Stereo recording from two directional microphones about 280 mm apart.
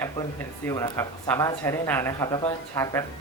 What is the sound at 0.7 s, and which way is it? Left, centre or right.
Speech, centre.